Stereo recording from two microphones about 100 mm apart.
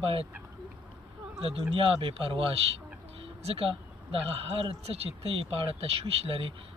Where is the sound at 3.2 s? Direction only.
70° right (ahead or behind).